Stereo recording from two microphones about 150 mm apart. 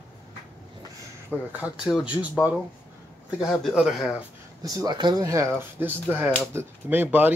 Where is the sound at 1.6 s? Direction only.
5° right (ahead or behind).